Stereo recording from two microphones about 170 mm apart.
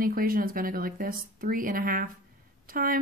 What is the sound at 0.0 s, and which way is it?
Speech, 60° right (ahead or behind).